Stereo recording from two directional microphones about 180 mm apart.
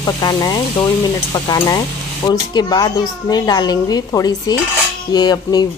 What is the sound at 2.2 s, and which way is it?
Speech, 20° left (ahead or behind).